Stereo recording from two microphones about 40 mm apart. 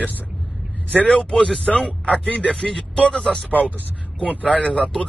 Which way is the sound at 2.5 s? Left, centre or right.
Centre.